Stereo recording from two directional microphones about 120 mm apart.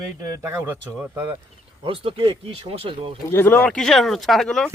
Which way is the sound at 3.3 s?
15° left (ahead or behind).